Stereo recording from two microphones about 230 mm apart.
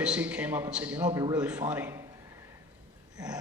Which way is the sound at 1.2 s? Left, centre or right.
Centre.